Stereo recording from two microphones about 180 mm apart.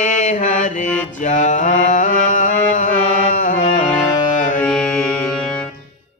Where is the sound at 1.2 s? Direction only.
45° left (ahead or behind).